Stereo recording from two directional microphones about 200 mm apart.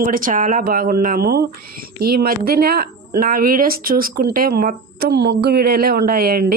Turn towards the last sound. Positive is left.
turn(degrees=-50)  # may be behind; listen again after turning